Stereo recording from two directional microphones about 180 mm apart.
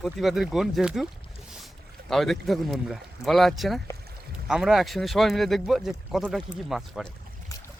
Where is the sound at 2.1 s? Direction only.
Centre (ahead or behind).